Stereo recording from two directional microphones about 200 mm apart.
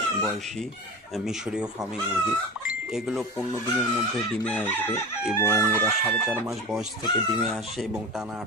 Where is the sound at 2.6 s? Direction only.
Centre (ahead or behind).